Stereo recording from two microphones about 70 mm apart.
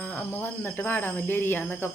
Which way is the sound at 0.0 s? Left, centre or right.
Left.